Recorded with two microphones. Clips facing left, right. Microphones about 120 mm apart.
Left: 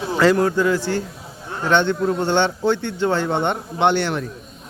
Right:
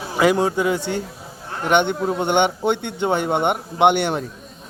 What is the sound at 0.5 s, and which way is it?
A man's voice, 20° right (ahead or behind).